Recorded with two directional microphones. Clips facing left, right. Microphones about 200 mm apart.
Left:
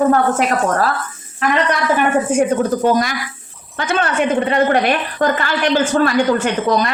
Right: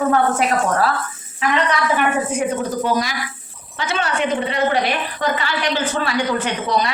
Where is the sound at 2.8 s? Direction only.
50° left (ahead or behind).